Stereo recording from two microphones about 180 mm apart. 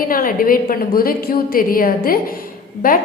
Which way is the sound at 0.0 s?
50° left (ahead or behind).